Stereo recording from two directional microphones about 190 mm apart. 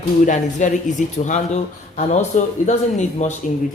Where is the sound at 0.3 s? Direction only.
40° left (ahead or behind).